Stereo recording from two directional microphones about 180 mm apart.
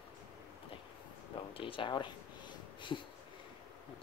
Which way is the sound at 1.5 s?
30° left (ahead or behind).